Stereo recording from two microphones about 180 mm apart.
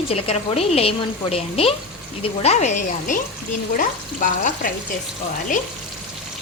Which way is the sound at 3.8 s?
50° left (ahead or behind).